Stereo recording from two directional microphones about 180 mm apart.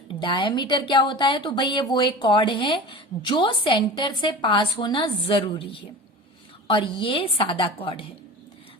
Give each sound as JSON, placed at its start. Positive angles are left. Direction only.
{"t": 0.1, "sound": "speech", "side_deg": 30}
{"t": 6.7, "sound": "speech", "side_deg": 30}